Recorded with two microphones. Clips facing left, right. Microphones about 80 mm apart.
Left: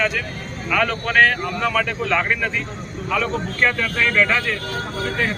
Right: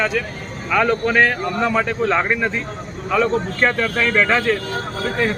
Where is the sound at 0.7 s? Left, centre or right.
Right.